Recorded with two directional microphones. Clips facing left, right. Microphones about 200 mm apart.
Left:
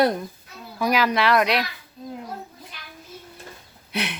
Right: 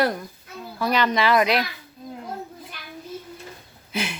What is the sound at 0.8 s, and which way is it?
Speech, 10° left (ahead or behind).